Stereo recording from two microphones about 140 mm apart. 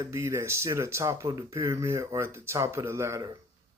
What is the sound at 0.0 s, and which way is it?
Speech, 20° right (ahead or behind).